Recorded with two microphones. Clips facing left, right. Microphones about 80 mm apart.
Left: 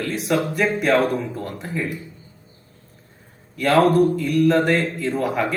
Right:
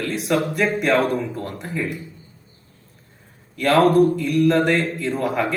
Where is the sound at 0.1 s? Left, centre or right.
Centre.